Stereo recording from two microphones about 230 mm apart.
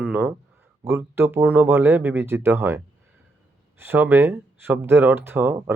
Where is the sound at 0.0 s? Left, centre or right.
Centre.